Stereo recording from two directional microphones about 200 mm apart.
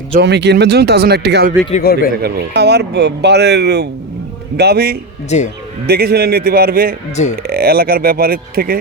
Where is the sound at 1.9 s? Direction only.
50° left (ahead or behind).